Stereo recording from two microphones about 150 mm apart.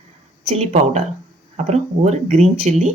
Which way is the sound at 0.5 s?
45° right (ahead or behind).